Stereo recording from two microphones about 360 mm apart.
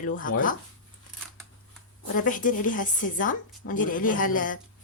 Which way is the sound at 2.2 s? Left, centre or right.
Left.